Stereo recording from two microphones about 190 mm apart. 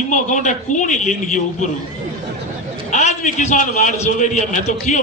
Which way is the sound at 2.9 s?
40° left (ahead or behind).